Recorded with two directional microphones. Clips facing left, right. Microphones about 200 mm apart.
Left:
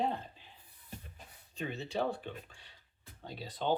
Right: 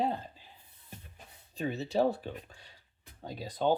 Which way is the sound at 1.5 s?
35° right (ahead or behind).